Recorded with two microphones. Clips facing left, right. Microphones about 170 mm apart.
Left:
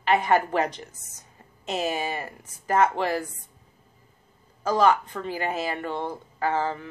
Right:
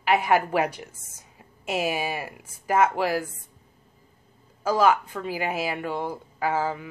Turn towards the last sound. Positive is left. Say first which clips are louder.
# even
turn(degrees=-10)  # may be behind; listen again after turning